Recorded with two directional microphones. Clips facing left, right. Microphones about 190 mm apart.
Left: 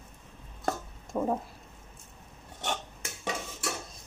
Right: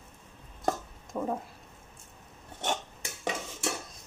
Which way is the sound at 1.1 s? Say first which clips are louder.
Left 3 dB; 40° left (ahead or behind).